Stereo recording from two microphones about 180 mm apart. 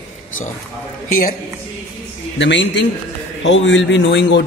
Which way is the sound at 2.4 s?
80° left.